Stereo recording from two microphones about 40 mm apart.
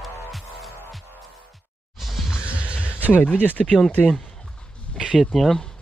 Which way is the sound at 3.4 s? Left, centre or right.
Left.